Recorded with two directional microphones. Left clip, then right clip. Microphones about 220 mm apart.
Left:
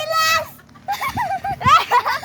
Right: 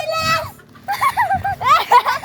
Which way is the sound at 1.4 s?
15° left (ahead or behind).